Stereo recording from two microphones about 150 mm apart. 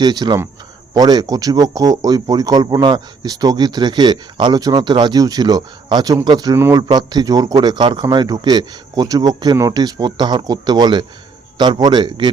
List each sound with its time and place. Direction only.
0.0 s a man's voice: 30° right (ahead or behind)